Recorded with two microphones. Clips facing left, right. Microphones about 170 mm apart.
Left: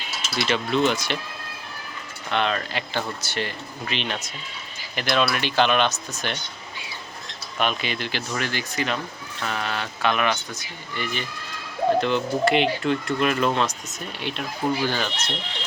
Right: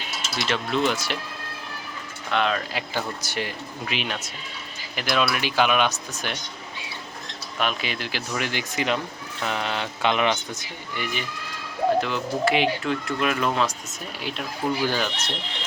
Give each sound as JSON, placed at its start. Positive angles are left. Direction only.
{"t": 0.3, "sound": "speech", "side_deg": 0}
{"t": 2.3, "sound": "speech", "side_deg": 0}
{"t": 7.6, "sound": "speech", "side_deg": -5}